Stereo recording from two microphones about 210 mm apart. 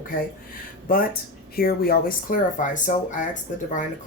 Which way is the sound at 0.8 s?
45° left (ahead or behind).